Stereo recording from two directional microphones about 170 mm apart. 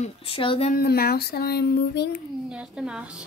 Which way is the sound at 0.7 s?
60° left (ahead or behind).